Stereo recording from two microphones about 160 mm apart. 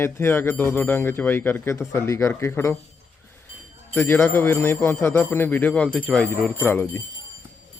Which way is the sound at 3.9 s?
15° left (ahead or behind).